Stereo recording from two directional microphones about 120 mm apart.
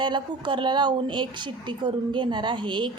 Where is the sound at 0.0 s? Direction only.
40° right (ahead or behind).